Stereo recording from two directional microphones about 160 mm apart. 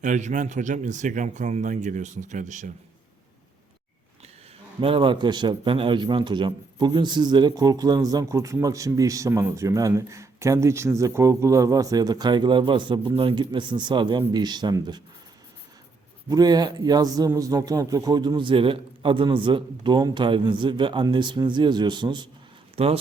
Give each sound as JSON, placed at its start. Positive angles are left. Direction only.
{"t": 0.0, "sound": "a man's voice", "side_deg": -50}
{"t": 4.8, "sound": "a man's voice", "side_deg": -35}
{"t": 16.3, "sound": "a man's voice", "side_deg": -25}
{"t": 22.7, "sound": "speech", "side_deg": -40}